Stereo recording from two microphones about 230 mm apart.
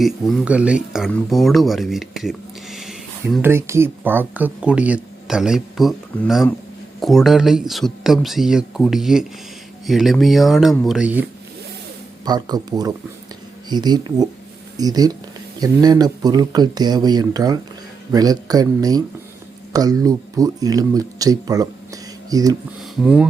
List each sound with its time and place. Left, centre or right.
0.0 s speech: centre
12.2 s speech: centre